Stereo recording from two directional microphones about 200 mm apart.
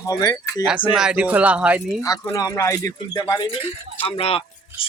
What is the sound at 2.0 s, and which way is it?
Speech, 15° left (ahead or behind).